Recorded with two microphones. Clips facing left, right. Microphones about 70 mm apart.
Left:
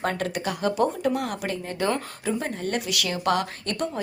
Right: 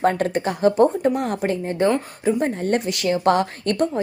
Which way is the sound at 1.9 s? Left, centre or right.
Right.